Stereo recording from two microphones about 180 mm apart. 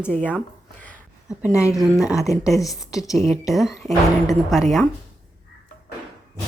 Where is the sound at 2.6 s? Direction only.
20° left (ahead or behind).